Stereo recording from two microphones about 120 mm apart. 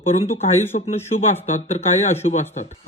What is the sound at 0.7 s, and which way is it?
Speech, 90° left.